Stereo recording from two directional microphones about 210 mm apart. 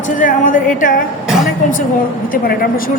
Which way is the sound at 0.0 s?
40° left (ahead or behind).